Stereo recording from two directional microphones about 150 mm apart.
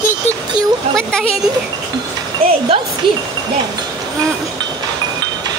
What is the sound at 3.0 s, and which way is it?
Speech, 35° right (ahead or behind).